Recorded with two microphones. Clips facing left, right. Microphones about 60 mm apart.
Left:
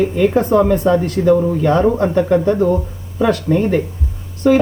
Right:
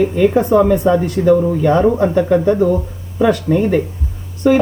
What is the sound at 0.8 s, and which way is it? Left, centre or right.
Speech, centre.